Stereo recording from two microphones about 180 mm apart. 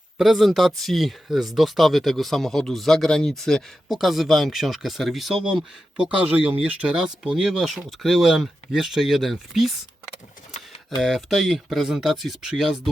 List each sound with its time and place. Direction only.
0.2 s speech: centre (ahead or behind)
11.0 s speech: centre (ahead or behind)